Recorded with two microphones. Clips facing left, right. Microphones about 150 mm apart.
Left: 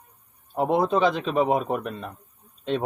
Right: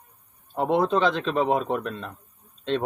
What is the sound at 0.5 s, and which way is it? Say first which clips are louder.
A man's voice: even; 10° left (ahead or behind).